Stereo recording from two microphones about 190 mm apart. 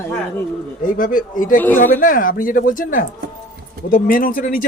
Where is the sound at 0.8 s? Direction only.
45° left (ahead or behind).